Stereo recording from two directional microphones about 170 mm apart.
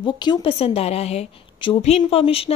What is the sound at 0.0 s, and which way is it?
A woman's voice, 25° left (ahead or behind).